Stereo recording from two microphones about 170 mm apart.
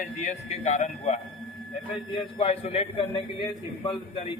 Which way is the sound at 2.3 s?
35° left (ahead or behind).